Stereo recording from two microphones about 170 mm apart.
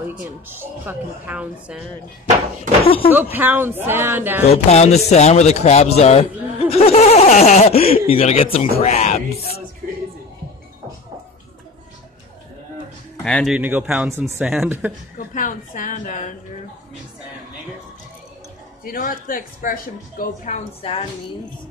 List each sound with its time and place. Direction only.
0.1 s a woman's voice: 10° right (ahead or behind)
3.1 s a woman's voice: 10° right (ahead or behind)
4.5 s a man's voice: 40° left (ahead or behind)
13.2 s speech: 5° left (ahead or behind)
13.6 s a woman's voice: 10° right (ahead or behind)
15.1 s speech: 50° left (ahead or behind)
18.9 s speech: 55° left (ahead or behind); by 21.1 s 35° left (ahead or behind)